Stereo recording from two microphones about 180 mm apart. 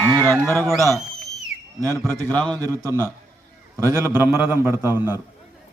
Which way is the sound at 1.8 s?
15° right (ahead or behind).